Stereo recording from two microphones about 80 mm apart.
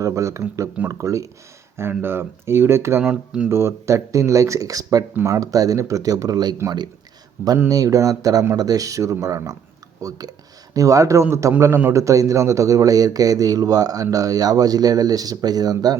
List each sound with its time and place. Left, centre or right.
0.0 s speech: right
1.7 s speech: right
3.0 s speech: centre
3.5 s a man's voice: right
7.7 s a man's voice: right